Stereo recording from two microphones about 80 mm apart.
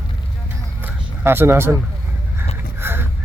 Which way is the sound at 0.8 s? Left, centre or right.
Right.